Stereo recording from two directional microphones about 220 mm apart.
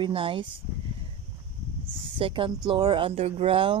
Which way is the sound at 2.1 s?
25° right (ahead or behind).